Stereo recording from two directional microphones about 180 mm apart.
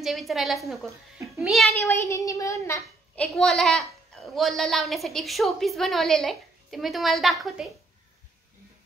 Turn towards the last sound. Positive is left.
turn(degrees=0)  # may be behind; listen again after turning